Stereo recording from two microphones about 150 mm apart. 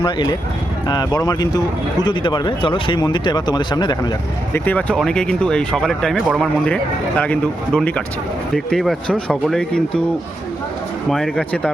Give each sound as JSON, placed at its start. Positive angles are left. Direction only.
{"t": 0.0, "sound": "speech", "side_deg": 35}
{"t": 4.5, "sound": "speech", "side_deg": 10}
{"t": 11.1, "sound": "speech", "side_deg": 5}